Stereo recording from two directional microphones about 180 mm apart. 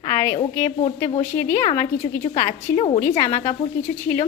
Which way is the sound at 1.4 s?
10° left (ahead or behind).